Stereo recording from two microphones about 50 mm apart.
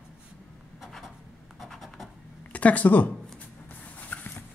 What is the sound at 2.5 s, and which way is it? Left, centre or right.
Speech, left.